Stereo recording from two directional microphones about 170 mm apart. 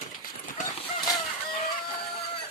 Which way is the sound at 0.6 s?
45° left (ahead or behind).